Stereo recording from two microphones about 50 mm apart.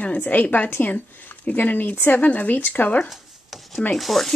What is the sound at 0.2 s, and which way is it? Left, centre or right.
Speech, left.